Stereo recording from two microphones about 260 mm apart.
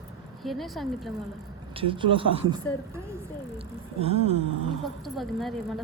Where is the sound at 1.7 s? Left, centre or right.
Centre.